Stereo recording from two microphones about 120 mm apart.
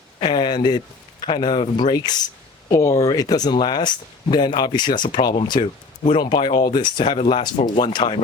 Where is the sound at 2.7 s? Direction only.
25° left (ahead or behind).